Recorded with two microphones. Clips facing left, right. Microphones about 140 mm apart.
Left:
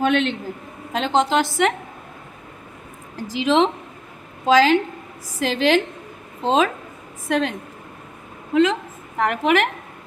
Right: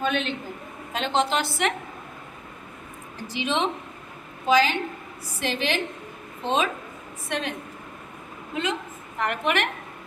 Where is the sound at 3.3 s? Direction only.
90° left.